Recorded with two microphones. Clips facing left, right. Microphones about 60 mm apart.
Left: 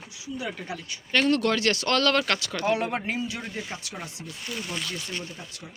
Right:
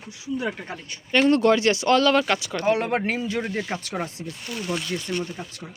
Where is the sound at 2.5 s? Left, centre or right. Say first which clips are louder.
Right 4 dB; right.